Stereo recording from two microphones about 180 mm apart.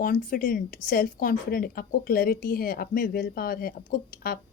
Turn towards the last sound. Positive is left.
turn(degrees=55)  # may be behind; listen again after turning